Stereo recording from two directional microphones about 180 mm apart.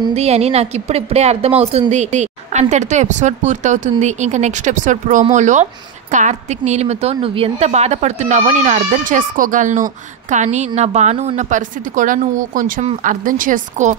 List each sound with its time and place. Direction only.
0.1 s a woman's voice: 35° right (ahead or behind)